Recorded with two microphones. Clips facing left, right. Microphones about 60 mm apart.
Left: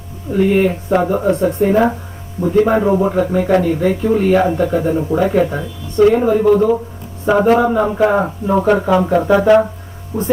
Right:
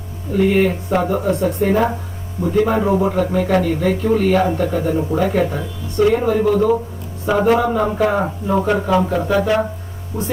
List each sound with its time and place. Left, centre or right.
0.3 s speech: centre; by 10.3 s left